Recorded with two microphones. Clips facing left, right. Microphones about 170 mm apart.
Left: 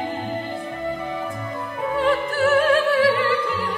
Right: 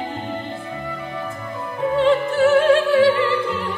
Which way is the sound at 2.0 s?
25° right (ahead or behind).